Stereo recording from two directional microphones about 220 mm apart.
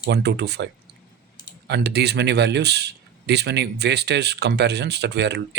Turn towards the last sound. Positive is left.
turn(degrees=-50)  # may be behind; listen again after turning